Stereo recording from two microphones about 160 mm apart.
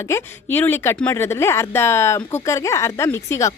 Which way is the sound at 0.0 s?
15° left (ahead or behind).